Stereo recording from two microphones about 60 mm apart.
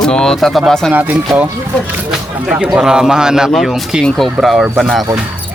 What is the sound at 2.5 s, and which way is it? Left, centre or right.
A man's voice, centre.